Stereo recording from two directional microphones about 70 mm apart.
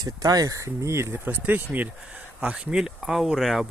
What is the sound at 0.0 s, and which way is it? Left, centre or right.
Speech, right.